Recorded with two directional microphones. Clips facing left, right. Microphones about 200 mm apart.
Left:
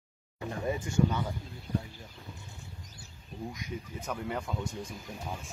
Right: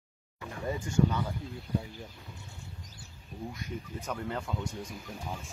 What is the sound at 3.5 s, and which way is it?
Speech, 10° left (ahead or behind).